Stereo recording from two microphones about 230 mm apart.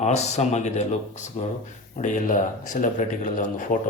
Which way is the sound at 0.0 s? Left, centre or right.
Left.